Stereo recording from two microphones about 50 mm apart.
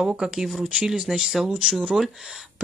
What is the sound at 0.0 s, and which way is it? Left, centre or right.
Speech, centre.